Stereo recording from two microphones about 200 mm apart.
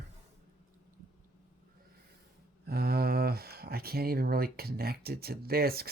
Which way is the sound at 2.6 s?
50° right (ahead or behind).